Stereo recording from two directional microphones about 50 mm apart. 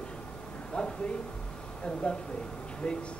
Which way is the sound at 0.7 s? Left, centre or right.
Centre.